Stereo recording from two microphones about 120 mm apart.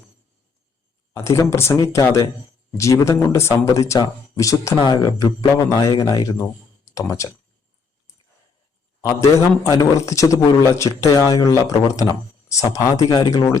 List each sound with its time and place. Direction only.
1.1 s a man's voice: 25° left (ahead or behind)
9.6 s speech: 25° left (ahead or behind)